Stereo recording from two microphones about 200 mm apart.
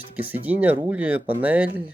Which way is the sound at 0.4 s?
10° right (ahead or behind).